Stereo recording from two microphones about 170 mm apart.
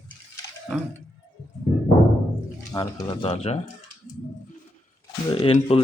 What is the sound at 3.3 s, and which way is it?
Speech, 40° left (ahead or behind).